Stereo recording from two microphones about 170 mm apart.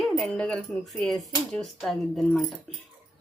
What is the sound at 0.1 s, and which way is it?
Speech, 5° left (ahead or behind).